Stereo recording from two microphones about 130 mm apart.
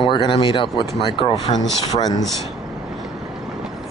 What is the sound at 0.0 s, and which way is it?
Speech, 40° left (ahead or behind).